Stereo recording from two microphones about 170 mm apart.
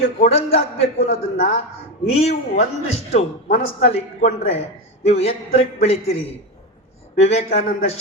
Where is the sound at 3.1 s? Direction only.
40° left (ahead or behind).